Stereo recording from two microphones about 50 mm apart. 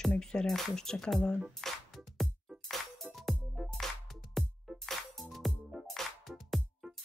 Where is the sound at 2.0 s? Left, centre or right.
Centre.